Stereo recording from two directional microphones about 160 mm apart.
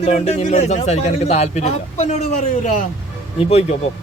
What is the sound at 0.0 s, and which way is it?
A man's voice, 40° left (ahead or behind).